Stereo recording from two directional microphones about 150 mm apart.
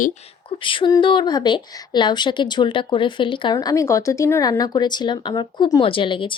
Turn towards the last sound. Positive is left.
turn(degrees=35)  # may be behind; listen again after turning